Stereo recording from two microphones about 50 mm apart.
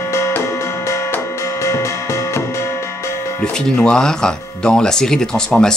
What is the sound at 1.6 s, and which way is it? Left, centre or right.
Music, left.